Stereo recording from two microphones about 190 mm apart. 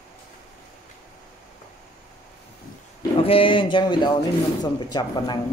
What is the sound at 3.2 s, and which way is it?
Speech, 30° left (ahead or behind).